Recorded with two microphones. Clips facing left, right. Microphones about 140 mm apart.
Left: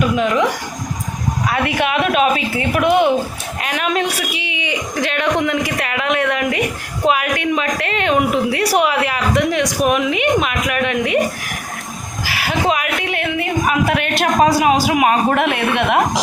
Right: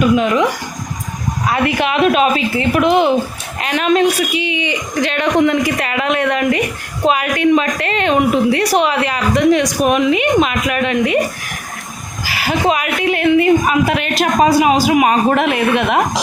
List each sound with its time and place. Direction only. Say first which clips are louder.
0.0 s speech: right 3 dB; centre (ahead or behind)
1.5 s speech: right 3 dB; centre (ahead or behind)
12.2 s speech: right 2 dB; centre (ahead or behind)